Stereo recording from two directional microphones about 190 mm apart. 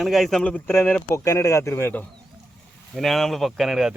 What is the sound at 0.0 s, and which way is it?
Speech, centre (ahead or behind).